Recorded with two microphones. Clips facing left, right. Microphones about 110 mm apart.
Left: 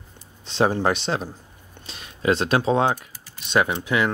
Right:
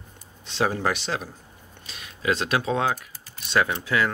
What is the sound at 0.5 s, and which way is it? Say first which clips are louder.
Speech: left 4 dB; 30° left (ahead or behind).